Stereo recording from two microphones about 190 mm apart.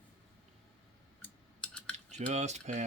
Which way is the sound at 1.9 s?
35° right (ahead or behind).